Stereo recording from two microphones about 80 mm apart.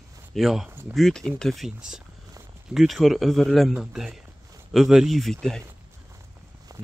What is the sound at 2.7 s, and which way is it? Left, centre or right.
Speech, centre.